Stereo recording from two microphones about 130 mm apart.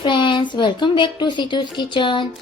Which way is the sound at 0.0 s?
40° left (ahead or behind).